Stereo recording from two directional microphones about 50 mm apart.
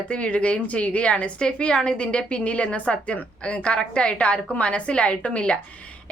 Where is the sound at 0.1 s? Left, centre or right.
Left.